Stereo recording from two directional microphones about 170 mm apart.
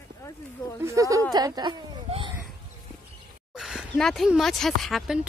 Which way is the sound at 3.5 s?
Centre (ahead or behind).